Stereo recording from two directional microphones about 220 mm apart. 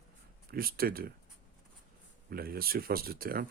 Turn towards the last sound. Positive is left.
turn(degrees=-45)  # may be behind; listen again after turning